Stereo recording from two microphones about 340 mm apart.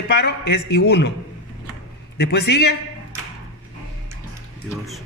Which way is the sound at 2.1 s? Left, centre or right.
Left.